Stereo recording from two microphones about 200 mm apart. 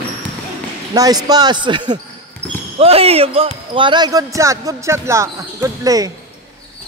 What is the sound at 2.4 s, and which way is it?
Basketball bounce, 5° left (ahead or behind).